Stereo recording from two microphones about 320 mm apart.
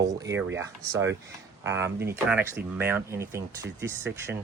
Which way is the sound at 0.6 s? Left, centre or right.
Centre.